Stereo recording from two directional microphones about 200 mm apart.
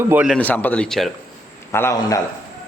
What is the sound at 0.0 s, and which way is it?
Speech, 10° right (ahead or behind).